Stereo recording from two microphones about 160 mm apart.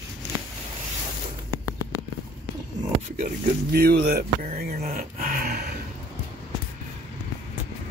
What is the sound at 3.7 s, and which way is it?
Speech, 80° right.